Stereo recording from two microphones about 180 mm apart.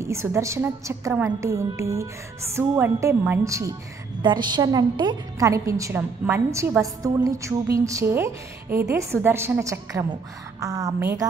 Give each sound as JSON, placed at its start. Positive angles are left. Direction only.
{"t": 0.0, "sound": "a woman's voice", "side_deg": -15}